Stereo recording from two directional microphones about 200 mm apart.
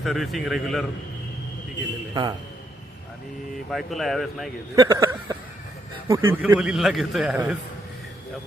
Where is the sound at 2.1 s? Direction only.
20° right (ahead or behind).